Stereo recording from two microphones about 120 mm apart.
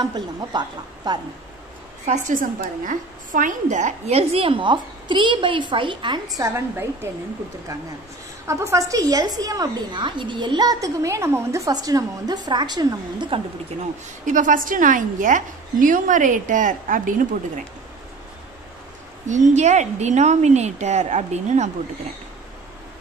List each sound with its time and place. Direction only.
0.0 s a woman's voice: 40° right (ahead or behind)
2.8 s a woman's voice: 90° right
4.2 s a woman's voice: 55° right (ahead or behind); by 7.1 s 20° right (ahead or behind)
8.5 s a woman's voice: 25° right (ahead or behind)
14.2 s a woman's voice: 90° right
19.2 s a woman's voice: 90° right; by 21.6 s 75° right (ahead or behind)